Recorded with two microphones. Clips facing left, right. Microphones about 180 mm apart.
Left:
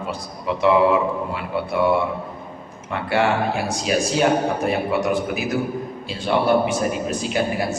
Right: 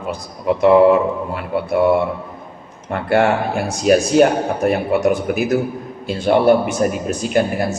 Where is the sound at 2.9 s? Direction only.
50° right (ahead or behind).